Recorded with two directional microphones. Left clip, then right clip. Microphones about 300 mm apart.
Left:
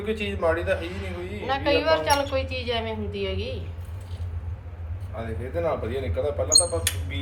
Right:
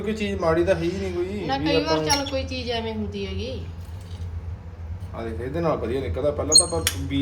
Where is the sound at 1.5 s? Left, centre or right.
Centre.